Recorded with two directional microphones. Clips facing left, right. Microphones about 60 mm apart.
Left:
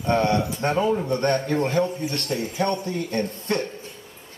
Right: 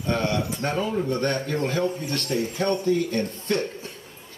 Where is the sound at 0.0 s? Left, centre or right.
Left.